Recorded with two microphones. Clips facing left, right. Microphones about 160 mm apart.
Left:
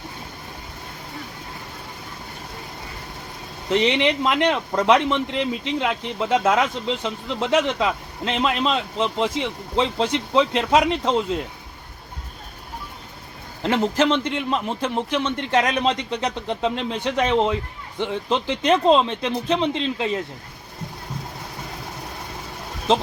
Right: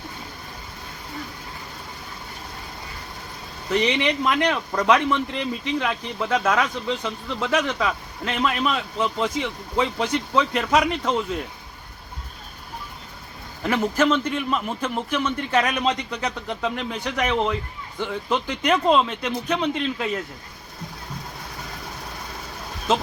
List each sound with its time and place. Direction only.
3.7 s a man's voice: 20° left (ahead or behind)
13.6 s a man's voice: 25° left (ahead or behind)